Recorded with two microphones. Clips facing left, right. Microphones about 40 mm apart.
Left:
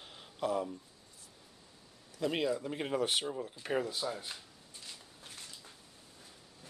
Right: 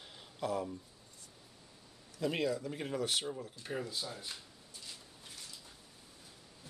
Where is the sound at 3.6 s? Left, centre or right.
Left.